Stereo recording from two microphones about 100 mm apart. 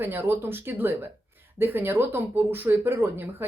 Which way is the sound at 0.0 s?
20° right (ahead or behind).